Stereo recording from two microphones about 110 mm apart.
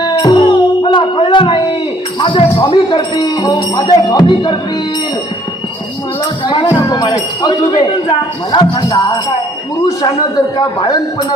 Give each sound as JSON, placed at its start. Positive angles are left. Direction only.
{"t": 0.0, "sound": "music", "side_deg": 40}
{"t": 2.1, "sound": "speech", "side_deg": 45}
{"t": 6.4, "sound": "music", "side_deg": 45}
{"t": 6.7, "sound": "speech", "side_deg": 45}